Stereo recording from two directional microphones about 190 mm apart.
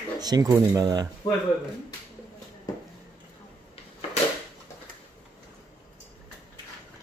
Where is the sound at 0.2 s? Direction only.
20° right (ahead or behind).